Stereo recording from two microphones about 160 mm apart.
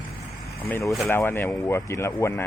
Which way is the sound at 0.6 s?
15° left (ahead or behind).